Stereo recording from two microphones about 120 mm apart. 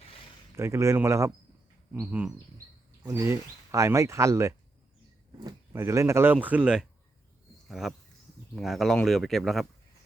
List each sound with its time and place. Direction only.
0.5 s speech: 20° right (ahead or behind)
1.9 s bird: 15° right (ahead or behind)
3.0 s speech: 20° right (ahead or behind); by 9.6 s centre (ahead or behind)